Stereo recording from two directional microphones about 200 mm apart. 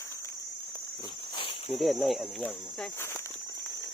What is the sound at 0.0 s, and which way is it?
Walk, 15° left (ahead or behind).